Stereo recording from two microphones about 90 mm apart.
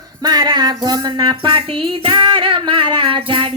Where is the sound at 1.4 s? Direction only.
70° right (ahead or behind).